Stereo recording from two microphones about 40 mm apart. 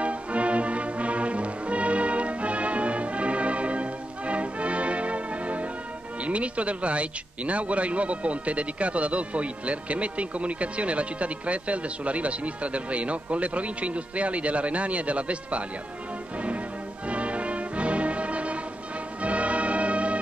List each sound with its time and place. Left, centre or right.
0.0 s music: right
6.2 s a man's voice: right
17.1 s music: right